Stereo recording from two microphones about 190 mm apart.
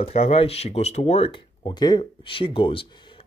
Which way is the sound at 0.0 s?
35° left (ahead or behind).